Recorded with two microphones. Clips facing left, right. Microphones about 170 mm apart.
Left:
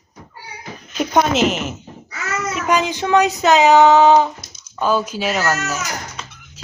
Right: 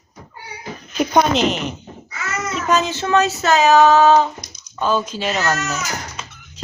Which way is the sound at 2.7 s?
15° left (ahead or behind).